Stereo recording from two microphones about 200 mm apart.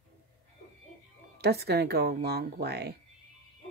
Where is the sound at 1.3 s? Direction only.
55° right (ahead or behind).